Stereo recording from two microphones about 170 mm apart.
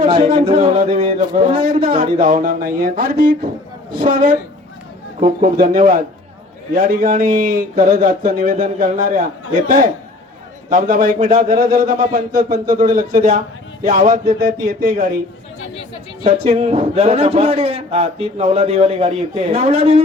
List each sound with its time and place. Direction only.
0.6 s a man's voice: 45° right (ahead or behind)
1.9 s speech: 50° right (ahead or behind)
16.2 s a man's voice: 35° right (ahead or behind)